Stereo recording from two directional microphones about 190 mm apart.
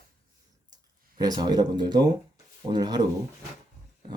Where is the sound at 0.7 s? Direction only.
20° right (ahead or behind).